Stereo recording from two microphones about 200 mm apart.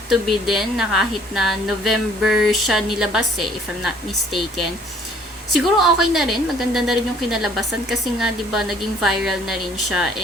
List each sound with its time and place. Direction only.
0.1 s a woman's voice: centre (ahead or behind)